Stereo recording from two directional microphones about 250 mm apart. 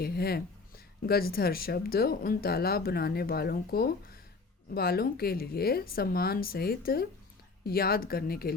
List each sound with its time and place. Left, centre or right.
0.0 s speech: left